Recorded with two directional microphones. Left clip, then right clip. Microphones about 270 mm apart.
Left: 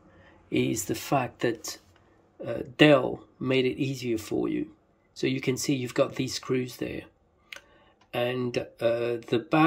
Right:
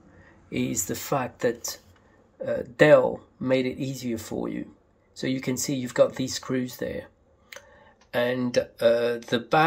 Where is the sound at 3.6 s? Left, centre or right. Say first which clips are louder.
Left 2 dB; centre.